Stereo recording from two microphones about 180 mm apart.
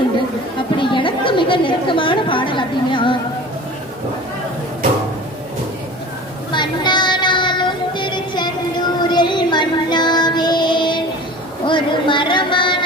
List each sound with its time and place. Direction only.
0.8 s chatter: 30° left (ahead or behind)
6.5 s child singing: 25° left (ahead or behind)
9.0 s music: 25° left (ahead or behind)
11.6 s a sound: 25° left (ahead or behind)